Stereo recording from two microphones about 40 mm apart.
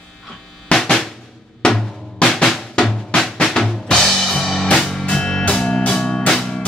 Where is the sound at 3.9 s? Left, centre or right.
Centre.